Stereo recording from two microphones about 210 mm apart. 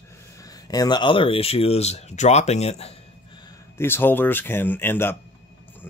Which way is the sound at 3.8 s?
10° left (ahead or behind).